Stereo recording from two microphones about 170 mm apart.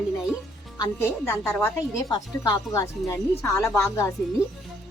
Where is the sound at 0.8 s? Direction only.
15° left (ahead or behind).